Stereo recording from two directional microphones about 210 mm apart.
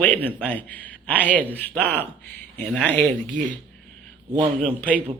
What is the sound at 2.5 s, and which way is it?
Speech, 5° left (ahead or behind).